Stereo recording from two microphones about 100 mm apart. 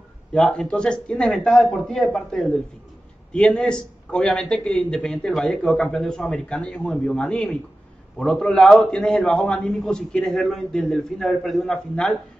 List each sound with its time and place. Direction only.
0.3 s a man's voice: 10° left (ahead or behind)